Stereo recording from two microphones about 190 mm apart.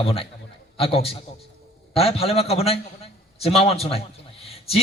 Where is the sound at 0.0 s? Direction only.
30° left (ahead or behind).